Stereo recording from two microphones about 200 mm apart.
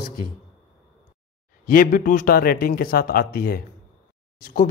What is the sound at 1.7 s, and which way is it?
Speech, 45° left (ahead or behind).